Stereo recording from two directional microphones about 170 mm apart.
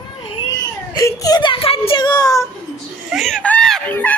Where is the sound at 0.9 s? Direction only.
20° left (ahead or behind).